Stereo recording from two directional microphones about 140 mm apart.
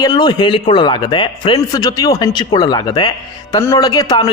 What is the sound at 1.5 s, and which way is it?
Speech, 25° left (ahead or behind).